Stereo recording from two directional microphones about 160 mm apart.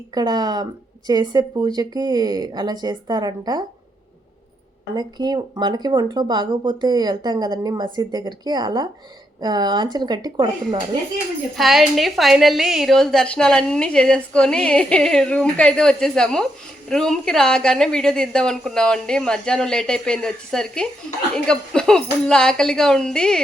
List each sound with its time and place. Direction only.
0.1 s speech: 25° right (ahead or behind)
4.9 s speech: 25° right (ahead or behind)
11.5 s a woman's voice: centre (ahead or behind)